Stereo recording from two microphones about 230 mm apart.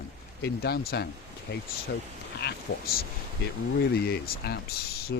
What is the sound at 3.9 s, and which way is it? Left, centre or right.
Speech, left.